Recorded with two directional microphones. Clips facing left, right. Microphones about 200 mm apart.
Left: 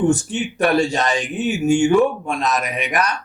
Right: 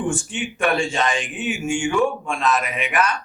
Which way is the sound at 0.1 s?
40° left (ahead or behind).